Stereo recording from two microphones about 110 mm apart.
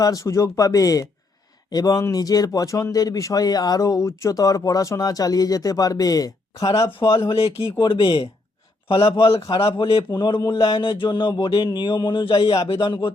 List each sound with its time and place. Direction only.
0.0 s speech: 30° left (ahead or behind)
7.3 s speech: 55° left (ahead or behind)